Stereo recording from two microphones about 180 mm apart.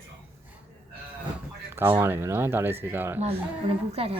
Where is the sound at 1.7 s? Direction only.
15° right (ahead or behind).